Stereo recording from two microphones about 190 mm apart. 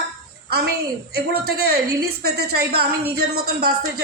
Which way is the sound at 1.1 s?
55° right (ahead or behind).